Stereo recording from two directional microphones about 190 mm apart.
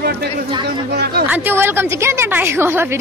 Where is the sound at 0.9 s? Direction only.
60° right (ahead or behind).